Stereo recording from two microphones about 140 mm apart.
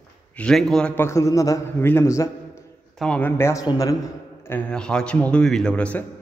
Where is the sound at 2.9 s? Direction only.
5° left (ahead or behind); by 3.9 s 25° left (ahead or behind).